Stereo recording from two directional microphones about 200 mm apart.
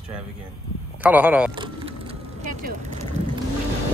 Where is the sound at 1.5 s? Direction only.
25° right (ahead or behind).